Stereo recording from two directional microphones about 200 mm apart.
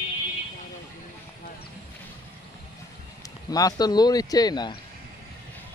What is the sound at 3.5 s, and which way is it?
Speech, 20° left (ahead or behind).